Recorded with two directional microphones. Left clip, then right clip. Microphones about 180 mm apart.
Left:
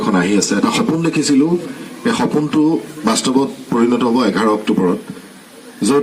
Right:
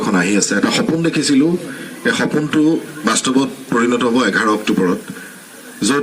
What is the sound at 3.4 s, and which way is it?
Speech, 35° left (ahead or behind).